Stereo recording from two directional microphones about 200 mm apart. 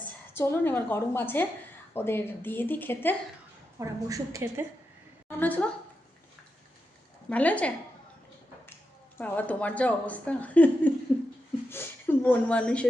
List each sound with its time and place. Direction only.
0.3 s speech: 10° left (ahead or behind)
3.8 s a woman's voice: 15° right (ahead or behind)
5.3 s speech: 10° left (ahead or behind)
7.3 s speech: 5° left (ahead or behind)
9.1 s speech: 10° left (ahead or behind)